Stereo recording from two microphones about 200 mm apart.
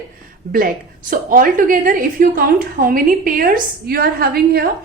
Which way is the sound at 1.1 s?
45° right (ahead or behind).